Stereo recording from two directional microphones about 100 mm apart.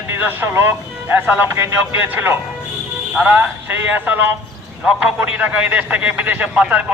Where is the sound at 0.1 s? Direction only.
20° right (ahead or behind).